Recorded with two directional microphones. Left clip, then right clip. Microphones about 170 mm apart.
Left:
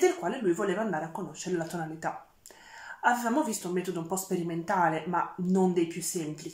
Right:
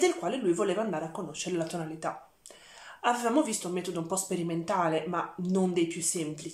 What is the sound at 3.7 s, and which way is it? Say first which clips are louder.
Speech: left 2 dB; 25° right (ahead or behind).